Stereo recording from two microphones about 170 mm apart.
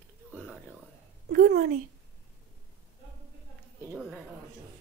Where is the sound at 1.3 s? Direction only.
55° right (ahead or behind).